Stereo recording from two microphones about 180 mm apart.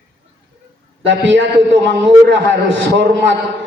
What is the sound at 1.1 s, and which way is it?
A man's voice, 90° right.